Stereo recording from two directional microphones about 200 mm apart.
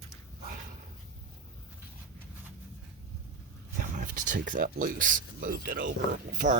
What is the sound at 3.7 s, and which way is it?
Speech, 40° right (ahead or behind).